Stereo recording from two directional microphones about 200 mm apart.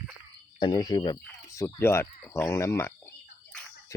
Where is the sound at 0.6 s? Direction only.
20° left (ahead or behind).